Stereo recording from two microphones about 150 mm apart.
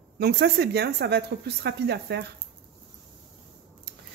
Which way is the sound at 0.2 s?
90° right.